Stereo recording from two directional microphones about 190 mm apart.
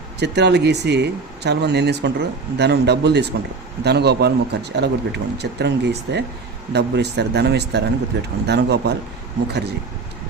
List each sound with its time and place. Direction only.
0.2 s speech: 60° right (ahead or behind)